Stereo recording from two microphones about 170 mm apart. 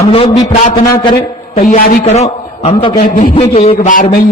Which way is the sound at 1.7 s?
55° left (ahead or behind).